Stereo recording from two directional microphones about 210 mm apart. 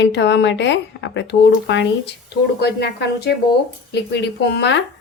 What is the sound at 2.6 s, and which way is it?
Speech, 50° left (ahead or behind).